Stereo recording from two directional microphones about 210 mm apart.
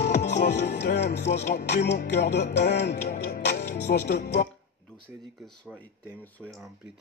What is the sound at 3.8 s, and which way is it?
Music, 50° left (ahead or behind).